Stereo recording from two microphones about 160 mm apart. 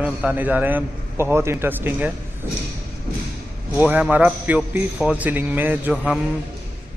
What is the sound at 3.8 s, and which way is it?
Speech, 10° right (ahead or behind).